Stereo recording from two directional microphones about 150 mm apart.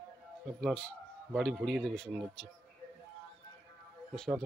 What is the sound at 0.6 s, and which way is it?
A man's voice, 5° left (ahead or behind).